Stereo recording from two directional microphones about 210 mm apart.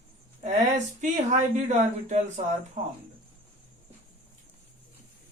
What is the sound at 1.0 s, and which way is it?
Speech, 35° right (ahead or behind).